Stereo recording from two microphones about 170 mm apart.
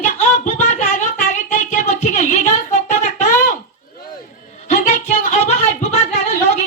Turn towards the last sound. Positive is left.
turn(degrees=40)  # may be behind; listen again after turning